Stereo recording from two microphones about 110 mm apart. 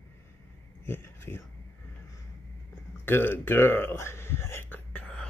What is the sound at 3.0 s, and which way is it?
Speech, 20° left (ahead or behind).